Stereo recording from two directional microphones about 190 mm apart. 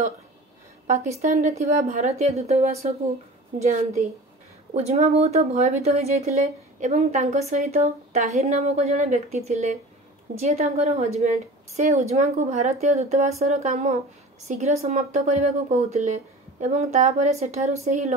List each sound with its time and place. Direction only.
0.8 s a woman's voice: 35° right (ahead or behind)